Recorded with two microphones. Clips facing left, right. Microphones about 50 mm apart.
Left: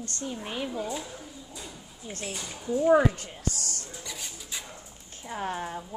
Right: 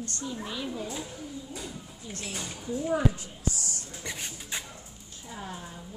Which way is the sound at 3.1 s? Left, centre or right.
Left.